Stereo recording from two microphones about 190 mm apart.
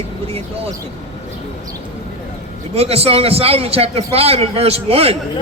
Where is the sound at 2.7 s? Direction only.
30° right (ahead or behind).